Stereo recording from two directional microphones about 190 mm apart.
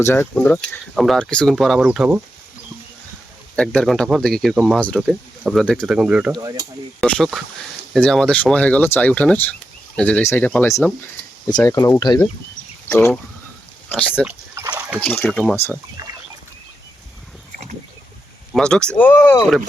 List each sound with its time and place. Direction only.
0.0 s speech: 10° left (ahead or behind); by 2.2 s 5° right (ahead or behind)
3.5 s speech: 5° left (ahead or behind)
6.3 s speech: 20° right (ahead or behind)
7.0 s speech: 5° left (ahead or behind)
14.3 s a sound: 10° right (ahead or behind)
15.0 s speech: 10° left (ahead or behind)
15.7 s speech: 20° right (ahead or behind)
18.5 s speech: 5° left (ahead or behind)